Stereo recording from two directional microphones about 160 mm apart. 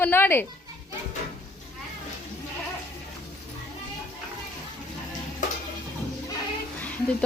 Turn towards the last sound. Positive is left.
turn(degrees=10)  # may be behind; listen again after turning